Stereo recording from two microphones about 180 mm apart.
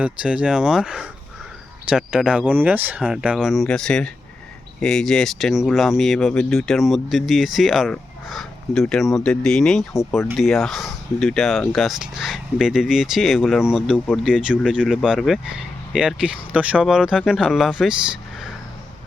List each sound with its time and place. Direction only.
0.0 s speech: 5° right (ahead or behind)